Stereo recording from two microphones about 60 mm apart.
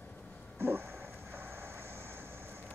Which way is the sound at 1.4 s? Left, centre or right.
Right.